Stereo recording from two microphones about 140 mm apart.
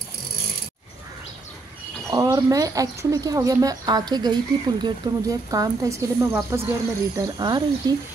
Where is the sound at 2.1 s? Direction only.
25° right (ahead or behind).